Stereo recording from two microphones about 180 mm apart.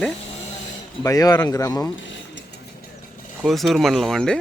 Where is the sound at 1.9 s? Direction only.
90° left.